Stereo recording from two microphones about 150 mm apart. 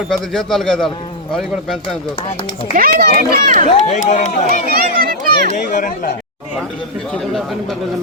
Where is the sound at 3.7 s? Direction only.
50° left (ahead or behind).